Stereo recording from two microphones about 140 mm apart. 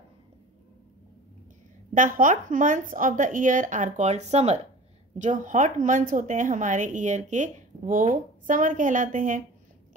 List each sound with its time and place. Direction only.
2.0 s speech: 70° right (ahead or behind); by 4.6 s 50° right (ahead or behind)
5.2 s speech: 65° right (ahead or behind)